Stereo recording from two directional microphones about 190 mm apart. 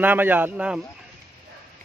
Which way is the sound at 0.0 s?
10° right (ahead or behind).